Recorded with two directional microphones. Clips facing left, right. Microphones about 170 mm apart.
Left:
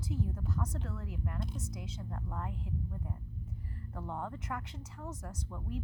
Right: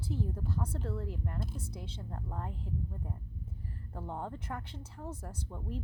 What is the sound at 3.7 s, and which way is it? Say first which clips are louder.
A woman's voice: even; 30° right (ahead or behind).